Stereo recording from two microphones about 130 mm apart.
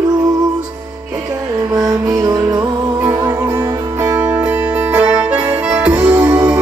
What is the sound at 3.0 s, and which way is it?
Music, 15° right (ahead or behind).